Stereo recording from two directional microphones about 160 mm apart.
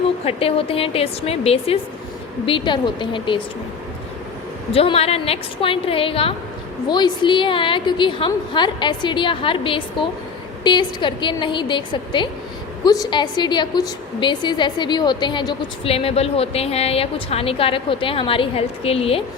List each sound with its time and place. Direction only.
0.3 s a woman's voice: 35° left (ahead or behind)
4.7 s a woman's voice: 35° left (ahead or behind)